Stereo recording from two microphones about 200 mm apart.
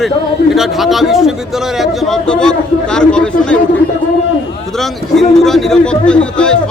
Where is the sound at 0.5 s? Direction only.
Centre (ahead or behind).